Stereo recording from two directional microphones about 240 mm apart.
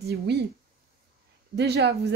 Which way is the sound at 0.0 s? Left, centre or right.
Right.